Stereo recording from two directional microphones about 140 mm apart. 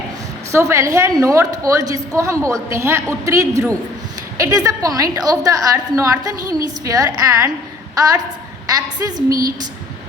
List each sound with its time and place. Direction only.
0.5 s a woman's voice: 20° right (ahead or behind)